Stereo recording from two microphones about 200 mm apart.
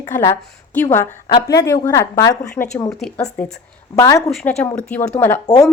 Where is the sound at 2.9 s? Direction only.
Centre (ahead or behind).